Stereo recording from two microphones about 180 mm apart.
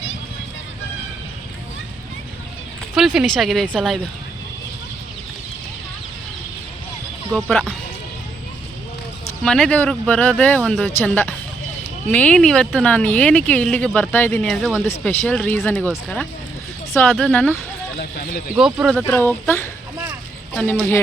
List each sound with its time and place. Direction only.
2.9 s speech: centre (ahead or behind)
7.3 s speech: 5° left (ahead or behind)
9.4 s speech: 5° left (ahead or behind)
14.4 s speech: centre (ahead or behind)
14.8 s speech: 10° left (ahead or behind)
18.0 s speech: 55° left (ahead or behind)
18.5 s speech: 5° right (ahead or behind)
18.9 s speech: 10° left (ahead or behind)